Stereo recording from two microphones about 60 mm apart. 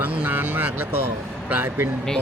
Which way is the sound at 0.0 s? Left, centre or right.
Right.